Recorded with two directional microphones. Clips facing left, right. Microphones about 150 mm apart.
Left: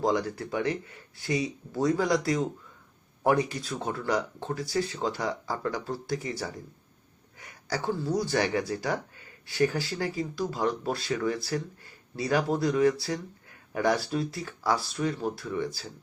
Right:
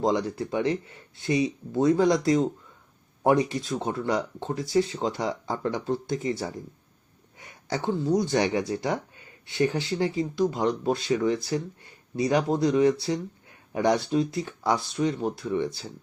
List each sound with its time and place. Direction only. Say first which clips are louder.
0.0 s speech: right 2 dB; 25° right (ahead or behind)